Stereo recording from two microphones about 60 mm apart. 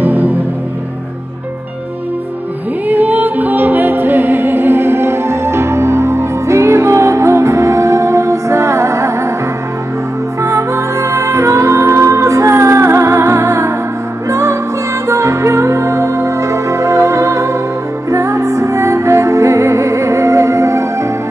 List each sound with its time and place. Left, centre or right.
0.0 s music: right
2.9 s music: right
10.4 s music: right